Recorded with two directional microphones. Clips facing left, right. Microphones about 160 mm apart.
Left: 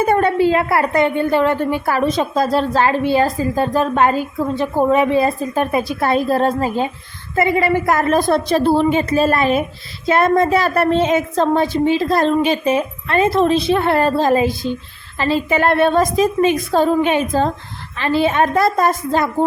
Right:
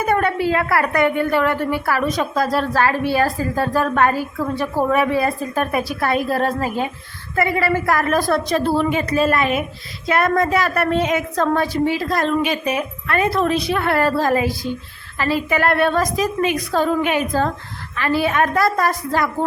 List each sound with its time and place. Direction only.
0.0 s a woman's voice: 25° left (ahead or behind)